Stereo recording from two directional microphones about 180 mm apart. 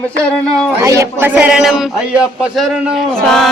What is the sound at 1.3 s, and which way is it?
Mantra, 5° right (ahead or behind).